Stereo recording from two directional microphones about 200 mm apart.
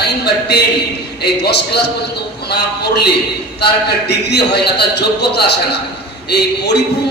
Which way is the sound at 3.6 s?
55° left (ahead or behind).